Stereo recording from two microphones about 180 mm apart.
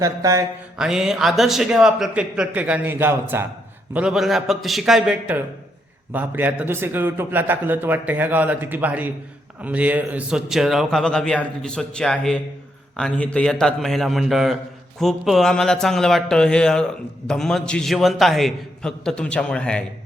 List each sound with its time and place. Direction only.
0.0 s a man's voice: 20° right (ahead or behind)
0.8 s a man's voice: 5° right (ahead or behind)